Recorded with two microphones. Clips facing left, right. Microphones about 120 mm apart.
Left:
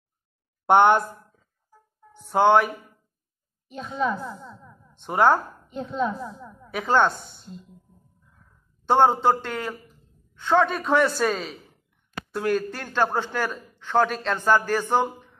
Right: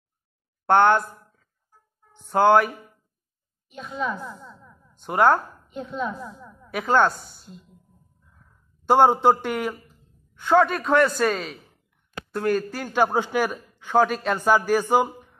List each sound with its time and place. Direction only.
0.7 s speech: 20° left (ahead or behind)
2.2 s a man's voice: centre (ahead or behind)
4.1 s a man's voice: 5° left (ahead or behind)
5.7 s speech: 30° left (ahead or behind)
6.6 s a man's voice: centre (ahead or behind)
8.8 s a man's voice: 10° right (ahead or behind)
12.9 s a man's voice: 15° right (ahead or behind)